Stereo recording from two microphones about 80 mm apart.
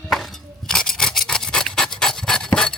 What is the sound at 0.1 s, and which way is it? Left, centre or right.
Rub, centre.